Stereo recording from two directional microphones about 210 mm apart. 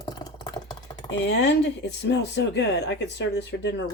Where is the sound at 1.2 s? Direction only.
55° left (ahead or behind).